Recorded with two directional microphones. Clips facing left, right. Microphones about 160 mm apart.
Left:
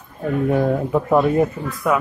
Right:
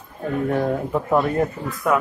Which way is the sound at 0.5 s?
5° left (ahead or behind).